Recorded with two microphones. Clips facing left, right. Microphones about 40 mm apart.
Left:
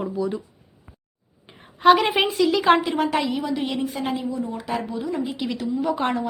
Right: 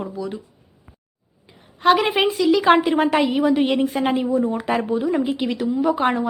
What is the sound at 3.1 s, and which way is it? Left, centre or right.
Speech, right.